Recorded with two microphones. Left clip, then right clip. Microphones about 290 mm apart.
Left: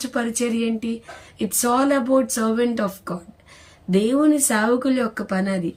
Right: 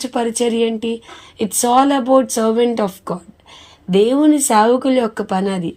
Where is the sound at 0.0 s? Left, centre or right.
Centre.